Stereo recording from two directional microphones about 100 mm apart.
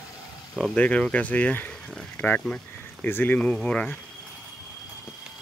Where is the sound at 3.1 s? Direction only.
20° left (ahead or behind).